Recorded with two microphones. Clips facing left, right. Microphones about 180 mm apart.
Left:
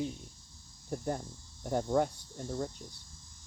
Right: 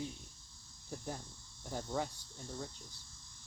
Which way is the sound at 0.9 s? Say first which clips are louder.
Left 9 dB; 75° left (ahead or behind).